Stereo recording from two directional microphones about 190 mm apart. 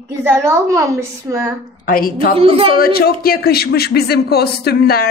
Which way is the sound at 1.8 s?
50° left (ahead or behind).